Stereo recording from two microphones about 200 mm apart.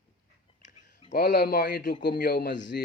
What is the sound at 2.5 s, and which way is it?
Speech, 65° left (ahead or behind).